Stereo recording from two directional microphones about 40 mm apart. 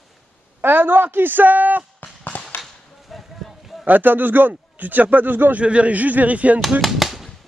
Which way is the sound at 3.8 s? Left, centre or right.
Right.